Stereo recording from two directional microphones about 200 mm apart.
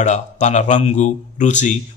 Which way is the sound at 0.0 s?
35° left (ahead or behind).